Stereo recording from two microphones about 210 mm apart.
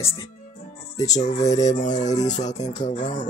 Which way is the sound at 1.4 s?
35° left (ahead or behind).